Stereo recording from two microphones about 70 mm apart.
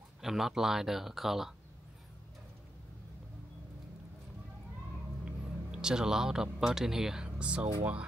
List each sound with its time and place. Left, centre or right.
0.2 s speech: centre
5.2 s speech: centre